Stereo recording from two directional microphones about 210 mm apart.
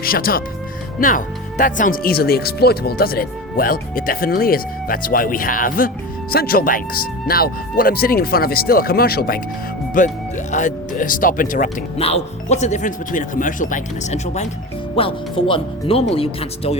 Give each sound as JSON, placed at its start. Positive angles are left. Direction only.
{"t": 0.0, "sound": "speech", "side_deg": 45}